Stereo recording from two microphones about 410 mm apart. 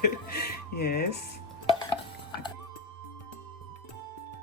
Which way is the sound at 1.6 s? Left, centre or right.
Centre.